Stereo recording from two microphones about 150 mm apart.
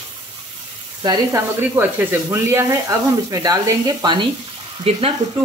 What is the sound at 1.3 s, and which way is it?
Speech, 15° right (ahead or behind).